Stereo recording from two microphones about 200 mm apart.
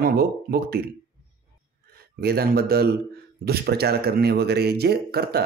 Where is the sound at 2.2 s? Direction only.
50° right (ahead or behind).